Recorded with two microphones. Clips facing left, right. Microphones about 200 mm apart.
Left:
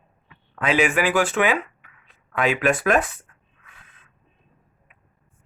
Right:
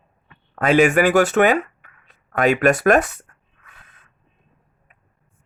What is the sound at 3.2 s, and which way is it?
Snort, 40° right (ahead or behind).